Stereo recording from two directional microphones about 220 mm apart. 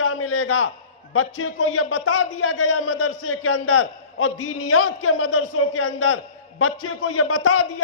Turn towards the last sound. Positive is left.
turn(degrees=75)  # may be behind; listen again after turning